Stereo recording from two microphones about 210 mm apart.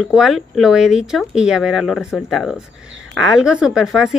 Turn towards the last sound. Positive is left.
turn(degrees=-5)  # may be behind; listen again after turning